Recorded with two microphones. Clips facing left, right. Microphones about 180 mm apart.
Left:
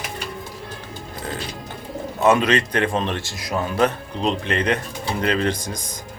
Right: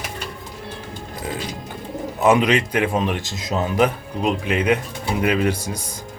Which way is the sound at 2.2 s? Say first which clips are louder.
Right 1 dB; 15° right (ahead or behind).